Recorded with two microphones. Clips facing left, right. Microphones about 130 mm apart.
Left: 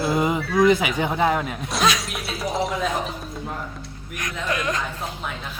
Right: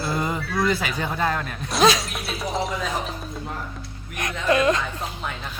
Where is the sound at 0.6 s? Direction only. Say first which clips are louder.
Left 7 dB; 20° left (ahead or behind).